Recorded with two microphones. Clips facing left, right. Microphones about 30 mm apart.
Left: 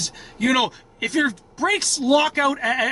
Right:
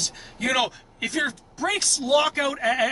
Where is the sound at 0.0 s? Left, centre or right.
Centre.